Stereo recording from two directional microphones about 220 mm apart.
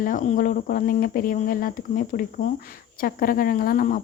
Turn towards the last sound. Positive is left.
turn(degrees=40)  # may be behind; listen again after turning